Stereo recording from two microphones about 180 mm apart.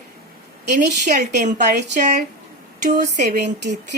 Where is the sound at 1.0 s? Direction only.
45° right (ahead or behind).